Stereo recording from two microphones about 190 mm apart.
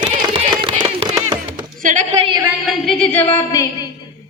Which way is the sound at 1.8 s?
40° right (ahead or behind).